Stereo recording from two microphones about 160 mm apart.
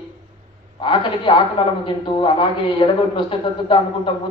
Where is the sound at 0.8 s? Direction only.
30° left (ahead or behind).